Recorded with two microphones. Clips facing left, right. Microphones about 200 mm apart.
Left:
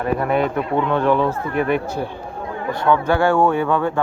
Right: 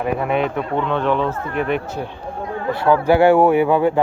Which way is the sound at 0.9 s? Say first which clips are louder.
Left 2 dB; 10° left (ahead or behind).